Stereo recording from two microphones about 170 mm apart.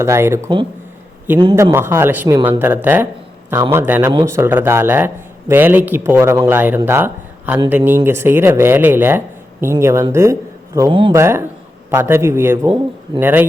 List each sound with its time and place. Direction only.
0.0 s a man's voice: 15° right (ahead or behind)
1.5 s a man's voice: 15° right (ahead or behind)